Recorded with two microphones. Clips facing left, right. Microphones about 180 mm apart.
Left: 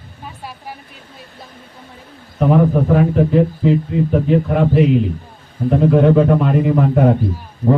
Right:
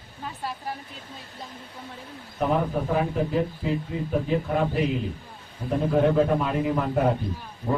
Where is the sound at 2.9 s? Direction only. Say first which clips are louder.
Left 8 dB; 65° left (ahead or behind).